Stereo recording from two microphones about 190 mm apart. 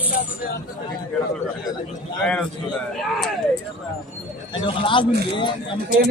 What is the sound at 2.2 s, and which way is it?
Speech, 5° left (ahead or behind).